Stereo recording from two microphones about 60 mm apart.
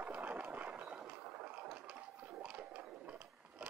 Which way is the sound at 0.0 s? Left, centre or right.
Right.